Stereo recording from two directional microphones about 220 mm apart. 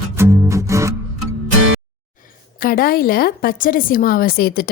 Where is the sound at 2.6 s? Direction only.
40° left (ahead or behind).